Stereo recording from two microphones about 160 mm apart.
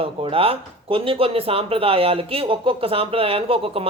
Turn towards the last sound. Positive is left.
turn(degrees=-35)  # may be behind; listen again after turning